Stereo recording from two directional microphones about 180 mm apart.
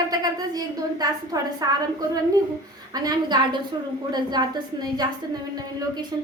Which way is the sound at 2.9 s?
20° right (ahead or behind).